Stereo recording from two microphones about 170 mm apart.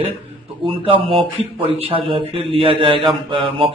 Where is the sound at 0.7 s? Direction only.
30° right (ahead or behind).